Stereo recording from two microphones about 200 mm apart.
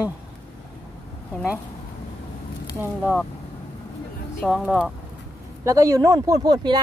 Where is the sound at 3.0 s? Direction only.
5° left (ahead or behind).